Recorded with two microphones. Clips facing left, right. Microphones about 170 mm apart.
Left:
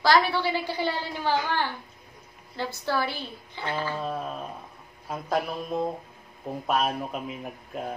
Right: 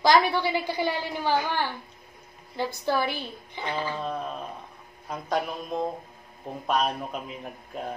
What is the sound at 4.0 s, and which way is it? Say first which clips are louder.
Speech: even; 5° left (ahead or behind).